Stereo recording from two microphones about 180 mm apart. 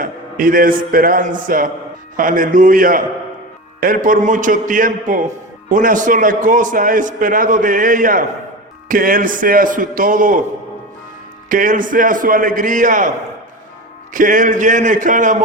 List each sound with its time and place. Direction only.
0.0 s a man's voice: 50° right (ahead or behind)
11.4 s a man's voice: 50° right (ahead or behind)
14.1 s a man's voice: 45° right (ahead or behind)